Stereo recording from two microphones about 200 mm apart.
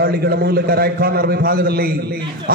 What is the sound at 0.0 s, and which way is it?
A man's voice, 50° right (ahead or behind).